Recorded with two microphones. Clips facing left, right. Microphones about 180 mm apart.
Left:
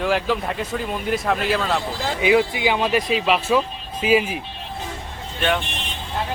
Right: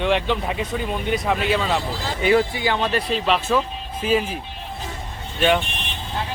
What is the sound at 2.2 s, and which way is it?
Speech, 10° left (ahead or behind).